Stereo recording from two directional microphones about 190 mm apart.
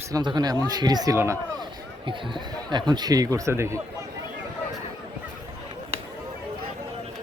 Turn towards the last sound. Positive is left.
turn(degrees=-35)  # may be behind; listen again after turning